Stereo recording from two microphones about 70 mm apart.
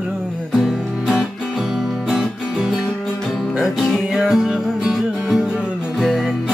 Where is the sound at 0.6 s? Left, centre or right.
Centre.